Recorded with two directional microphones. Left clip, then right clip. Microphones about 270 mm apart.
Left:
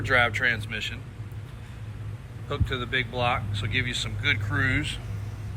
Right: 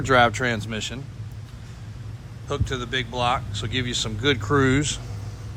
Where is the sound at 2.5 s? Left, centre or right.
Centre.